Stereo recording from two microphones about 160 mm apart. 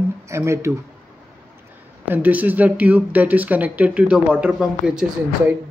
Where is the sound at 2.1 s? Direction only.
10° right (ahead or behind).